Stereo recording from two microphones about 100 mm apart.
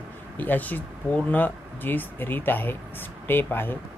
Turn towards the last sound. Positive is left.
turn(degrees=20)  # may be behind; listen again after turning